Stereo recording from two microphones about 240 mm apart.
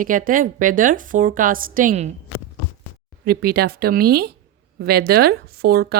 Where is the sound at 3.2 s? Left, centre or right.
Right.